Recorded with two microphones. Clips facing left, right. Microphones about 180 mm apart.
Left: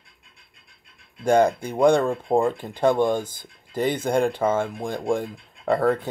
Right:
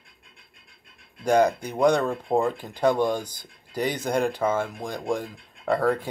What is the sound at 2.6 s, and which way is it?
Speech, 25° left (ahead or behind).